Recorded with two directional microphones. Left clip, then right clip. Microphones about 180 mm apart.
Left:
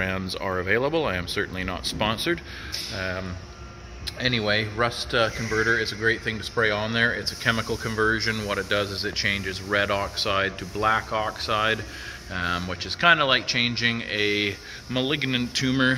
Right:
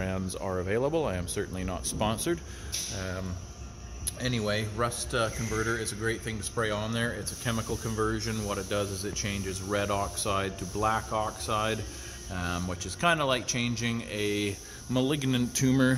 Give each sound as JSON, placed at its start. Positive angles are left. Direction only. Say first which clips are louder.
{"t": 0.0, "sound": "speech", "louder": "left 6 dB", "side_deg": -5}
{"t": 3.0, "sound": "speech", "louder": "left 7 dB", "side_deg": 0}
{"t": 8.5, "sound": "speech", "louder": "left 3 dB", "side_deg": -15}
{"t": 14.9, "sound": "speech", "louder": "left 4 dB", "side_deg": -30}